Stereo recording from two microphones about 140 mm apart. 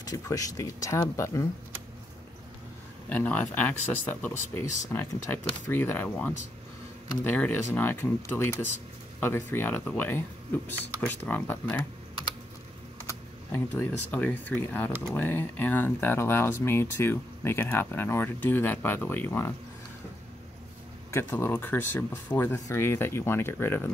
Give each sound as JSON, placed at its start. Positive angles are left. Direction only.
{"t": 0.0, "sound": "speech", "side_deg": 25}
{"t": 3.1, "sound": "speech", "side_deg": 10}
{"t": 13.0, "sound": "speech", "side_deg": 20}
{"t": 21.1, "sound": "speech", "side_deg": 15}